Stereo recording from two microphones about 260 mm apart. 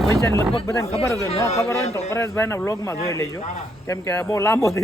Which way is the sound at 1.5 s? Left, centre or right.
Centre.